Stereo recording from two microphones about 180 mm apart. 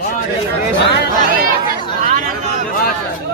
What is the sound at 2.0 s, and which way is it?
Speech, 45° right (ahead or behind).